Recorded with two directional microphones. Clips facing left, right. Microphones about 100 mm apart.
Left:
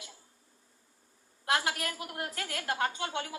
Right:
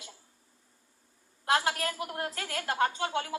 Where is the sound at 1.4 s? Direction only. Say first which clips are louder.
Right 3 dB; 30° right (ahead or behind).